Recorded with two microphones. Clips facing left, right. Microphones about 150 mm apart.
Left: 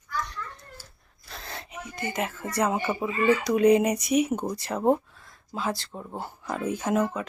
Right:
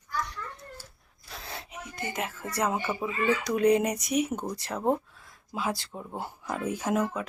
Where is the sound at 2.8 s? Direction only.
15° left (ahead or behind).